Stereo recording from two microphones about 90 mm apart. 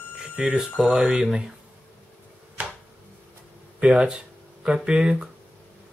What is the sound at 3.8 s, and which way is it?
Speech, 10° right (ahead or behind).